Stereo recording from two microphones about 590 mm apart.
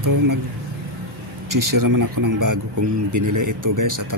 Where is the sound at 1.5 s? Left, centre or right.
Right.